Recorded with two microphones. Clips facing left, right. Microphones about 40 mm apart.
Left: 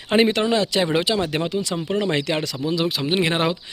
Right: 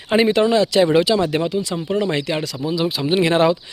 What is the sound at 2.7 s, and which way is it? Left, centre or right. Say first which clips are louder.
Speech: right 2 dB; left.